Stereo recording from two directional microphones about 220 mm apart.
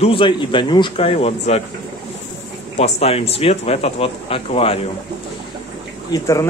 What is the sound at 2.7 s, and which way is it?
Speech, 30° left (ahead or behind).